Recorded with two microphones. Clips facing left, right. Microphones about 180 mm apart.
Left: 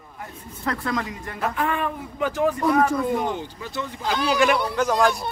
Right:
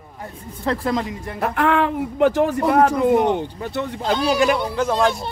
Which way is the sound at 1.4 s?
70° right (ahead or behind).